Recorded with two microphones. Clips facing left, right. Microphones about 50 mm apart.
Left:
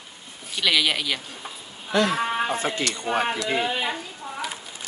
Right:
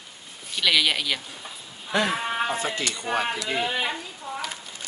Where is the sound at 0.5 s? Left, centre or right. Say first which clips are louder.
Even; centre.